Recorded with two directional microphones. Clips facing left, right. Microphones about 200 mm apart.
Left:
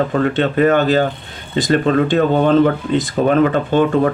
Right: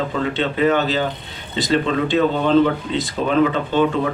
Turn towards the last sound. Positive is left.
turn(degrees=50)  # may be behind; listen again after turning